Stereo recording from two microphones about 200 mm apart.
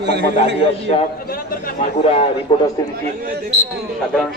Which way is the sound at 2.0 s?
30° left (ahead or behind).